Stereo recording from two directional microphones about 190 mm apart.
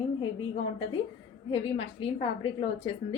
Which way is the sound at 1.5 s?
30° left (ahead or behind).